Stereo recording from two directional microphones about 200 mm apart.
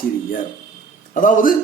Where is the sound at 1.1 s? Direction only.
40° left (ahead or behind).